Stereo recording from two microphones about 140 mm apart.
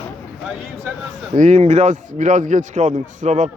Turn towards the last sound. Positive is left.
turn(degrees=-60)  # may be behind; listen again after turning